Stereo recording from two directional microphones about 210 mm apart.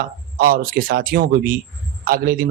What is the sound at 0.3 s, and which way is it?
Speech, 45° right (ahead or behind).